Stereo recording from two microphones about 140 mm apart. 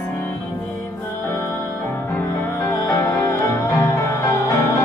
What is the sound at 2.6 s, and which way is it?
Music, 20° left (ahead or behind).